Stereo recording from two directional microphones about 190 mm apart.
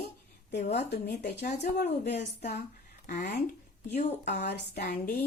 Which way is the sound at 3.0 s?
50° left (ahead or behind).